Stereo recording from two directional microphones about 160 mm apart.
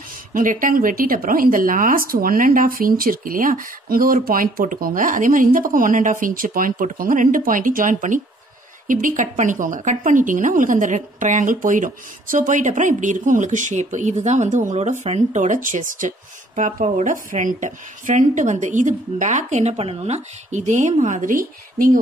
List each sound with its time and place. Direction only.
0.3 s a woman's voice: 55° right (ahead or behind)